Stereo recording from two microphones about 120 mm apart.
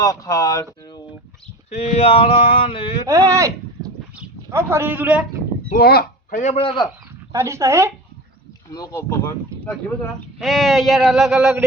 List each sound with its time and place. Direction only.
0.0 s speech: 30° left (ahead or behind)
1.7 s male singing: 60° left (ahead or behind); by 3.0 s 45° left (ahead or behind)
3.1 s speech: 30° right (ahead or behind)
4.5 s a man's voice: 20° right (ahead or behind)
6.3 s a man's voice: 75° left (ahead or behind)
6.6 s male singing: 50° left (ahead or behind)
7.3 s speech: 25° right (ahead or behind)
8.7 s speech: 30° left (ahead or behind)
10.3 s a sound: centre (ahead or behind)